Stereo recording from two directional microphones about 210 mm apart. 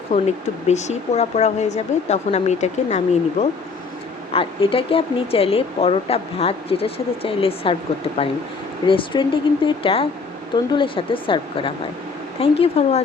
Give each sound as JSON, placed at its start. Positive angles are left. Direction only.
{"t": 0.1, "sound": "speech", "side_deg": 30}
{"t": 8.9, "sound": "speech", "side_deg": 25}